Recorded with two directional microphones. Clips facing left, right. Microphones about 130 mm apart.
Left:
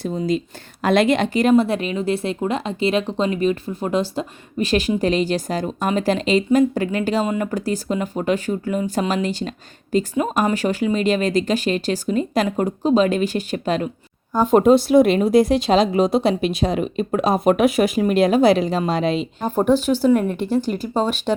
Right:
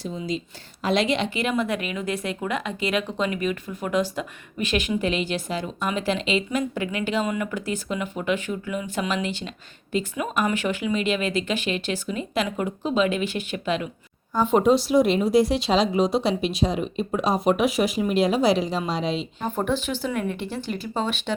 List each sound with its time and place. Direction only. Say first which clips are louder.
0.0 s a woman's voice: left 7 dB; 55° left (ahead or behind)